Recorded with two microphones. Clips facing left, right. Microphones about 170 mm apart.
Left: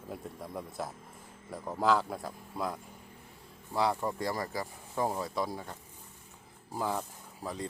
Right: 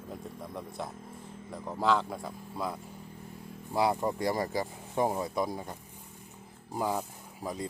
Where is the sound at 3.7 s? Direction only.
15° right (ahead or behind).